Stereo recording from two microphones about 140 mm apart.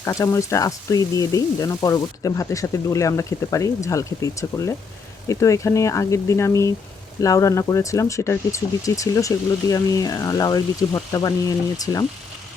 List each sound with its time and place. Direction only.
0.0 s speech: 20° left (ahead or behind)